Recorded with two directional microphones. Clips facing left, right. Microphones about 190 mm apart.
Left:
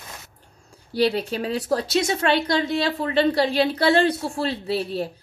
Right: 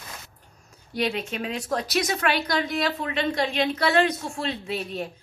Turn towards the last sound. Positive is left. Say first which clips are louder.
# left 5 dB
turn(degrees=35)  # may be behind; listen again after turning